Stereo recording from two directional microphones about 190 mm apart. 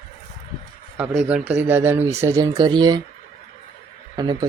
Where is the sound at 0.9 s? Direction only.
5° right (ahead or behind); by 3.0 s 25° right (ahead or behind).